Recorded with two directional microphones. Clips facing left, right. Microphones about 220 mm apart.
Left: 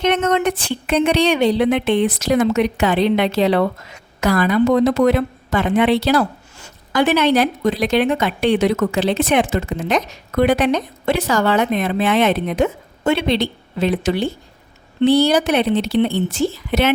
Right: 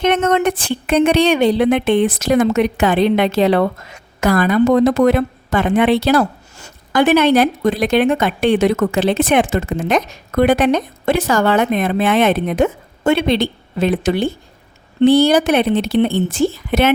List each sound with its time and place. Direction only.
0.0 s speech: 50° right (ahead or behind)